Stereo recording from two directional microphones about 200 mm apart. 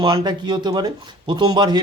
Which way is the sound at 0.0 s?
20° right (ahead or behind).